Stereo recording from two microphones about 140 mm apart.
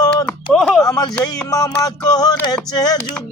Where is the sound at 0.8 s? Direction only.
25° left (ahead or behind).